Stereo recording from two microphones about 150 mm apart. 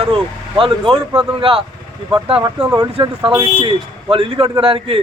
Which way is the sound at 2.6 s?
25° right (ahead or behind).